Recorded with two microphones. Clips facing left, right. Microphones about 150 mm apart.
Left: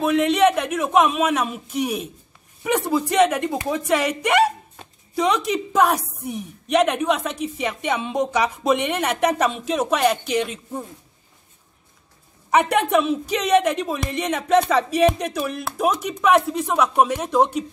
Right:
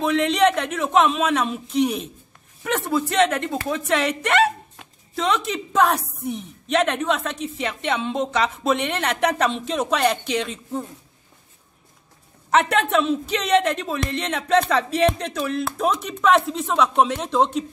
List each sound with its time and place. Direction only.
0.0 s a woman's voice: 5° left (ahead or behind)
12.4 s a woman's voice: 10° left (ahead or behind)